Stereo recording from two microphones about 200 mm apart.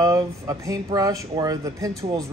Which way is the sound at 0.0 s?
15° right (ahead or behind).